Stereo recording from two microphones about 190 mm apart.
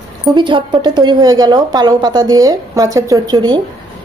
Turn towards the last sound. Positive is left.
turn(degrees=-20)  # may be behind; listen again after turning